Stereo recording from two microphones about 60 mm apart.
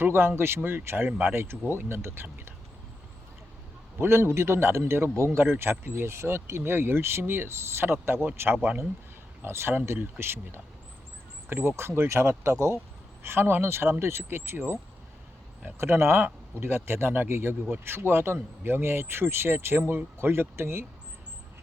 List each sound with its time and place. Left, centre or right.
0.0 s speech: right
3.9 s speech: right
9.5 s speech: right
13.2 s speech: right